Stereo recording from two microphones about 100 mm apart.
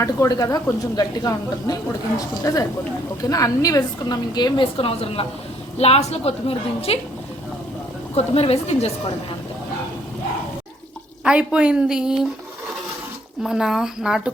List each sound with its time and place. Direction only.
0.0 s speech: 35° left (ahead or behind); by 5.2 s 70° left (ahead or behind)
5.7 s a woman's voice: 90° left
8.1 s a woman's voice: 90° left
11.2 s a woman's voice: 10° right (ahead or behind)
13.4 s speech: 5° right (ahead or behind)